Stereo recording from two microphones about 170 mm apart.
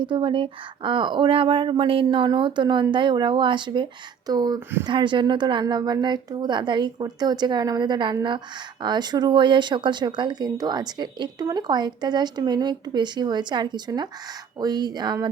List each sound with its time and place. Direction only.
0.0 s speech: 30° right (ahead or behind)